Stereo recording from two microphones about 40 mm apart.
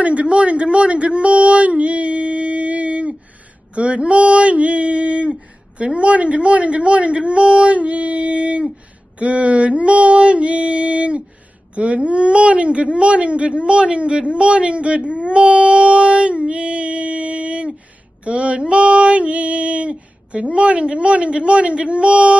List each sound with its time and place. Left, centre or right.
0.0 s a woman's voice: right